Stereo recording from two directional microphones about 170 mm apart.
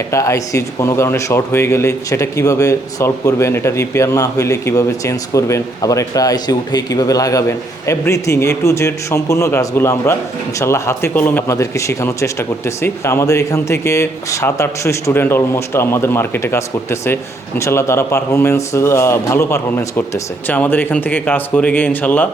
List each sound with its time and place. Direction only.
0.1 s speech: 15° left (ahead or behind)